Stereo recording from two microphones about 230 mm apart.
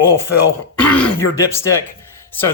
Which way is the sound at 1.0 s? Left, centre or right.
Centre.